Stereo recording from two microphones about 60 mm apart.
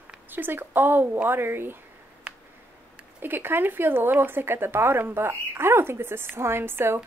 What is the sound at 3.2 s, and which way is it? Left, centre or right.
Speech, right.